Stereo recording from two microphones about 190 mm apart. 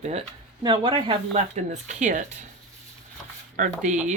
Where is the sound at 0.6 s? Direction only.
25° right (ahead or behind); by 2.4 s 40° right (ahead or behind).